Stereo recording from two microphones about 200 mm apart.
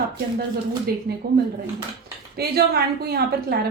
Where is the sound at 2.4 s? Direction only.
50° right (ahead or behind).